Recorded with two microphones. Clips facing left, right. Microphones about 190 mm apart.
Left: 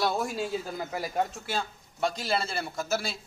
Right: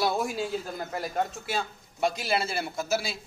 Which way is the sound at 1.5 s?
5° right (ahead or behind).